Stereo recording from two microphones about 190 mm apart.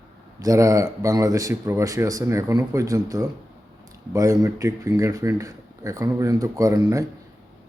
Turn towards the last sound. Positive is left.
turn(degrees=-20)  # may be behind; listen again after turning